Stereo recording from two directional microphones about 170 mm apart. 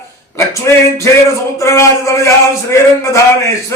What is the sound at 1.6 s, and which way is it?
Speech, 15° left (ahead or behind).